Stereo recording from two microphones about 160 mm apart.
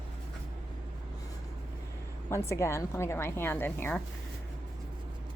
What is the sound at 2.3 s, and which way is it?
A woman's voice, 15° left (ahead or behind).